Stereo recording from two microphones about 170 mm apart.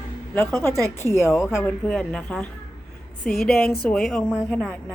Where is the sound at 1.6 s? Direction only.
5° left (ahead or behind).